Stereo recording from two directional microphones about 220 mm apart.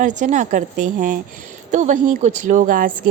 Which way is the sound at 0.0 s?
35° right (ahead or behind).